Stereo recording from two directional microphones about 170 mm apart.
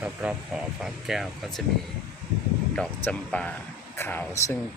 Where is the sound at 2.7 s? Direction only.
5° left (ahead or behind).